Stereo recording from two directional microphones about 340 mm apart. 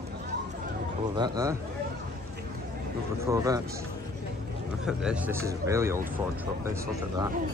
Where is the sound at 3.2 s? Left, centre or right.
Centre.